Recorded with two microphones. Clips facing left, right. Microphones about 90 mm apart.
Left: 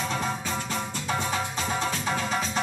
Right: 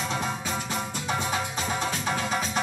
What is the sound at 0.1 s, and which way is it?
Music, 15° right (ahead or behind).